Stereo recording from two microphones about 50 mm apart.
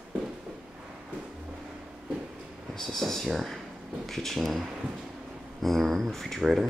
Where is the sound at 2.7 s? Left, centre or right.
Centre.